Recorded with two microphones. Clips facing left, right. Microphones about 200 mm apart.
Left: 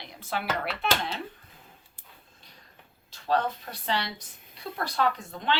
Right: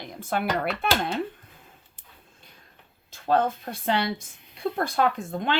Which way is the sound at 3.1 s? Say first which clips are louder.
Right 4 dB; 50° right (ahead or behind).